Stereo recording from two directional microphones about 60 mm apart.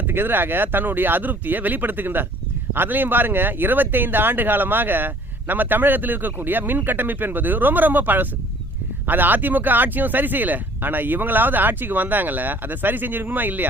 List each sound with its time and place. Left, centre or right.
0.1 s speech: right